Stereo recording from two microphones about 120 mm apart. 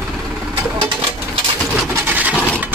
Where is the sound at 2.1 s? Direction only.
15° right (ahead or behind).